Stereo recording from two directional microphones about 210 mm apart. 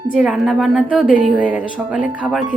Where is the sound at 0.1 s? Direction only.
Centre (ahead or behind).